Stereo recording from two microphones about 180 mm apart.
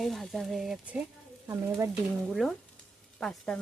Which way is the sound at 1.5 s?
15° right (ahead or behind).